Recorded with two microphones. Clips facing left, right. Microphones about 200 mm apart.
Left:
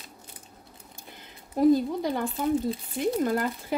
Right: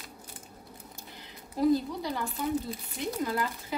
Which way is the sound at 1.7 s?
50° left (ahead or behind).